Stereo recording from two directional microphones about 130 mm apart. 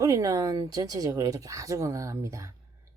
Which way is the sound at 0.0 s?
25° right (ahead or behind).